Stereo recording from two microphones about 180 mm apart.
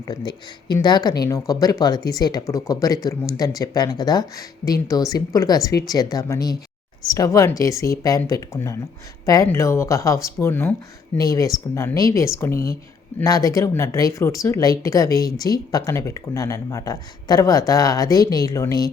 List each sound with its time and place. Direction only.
0.3 s speech: 25° left (ahead or behind)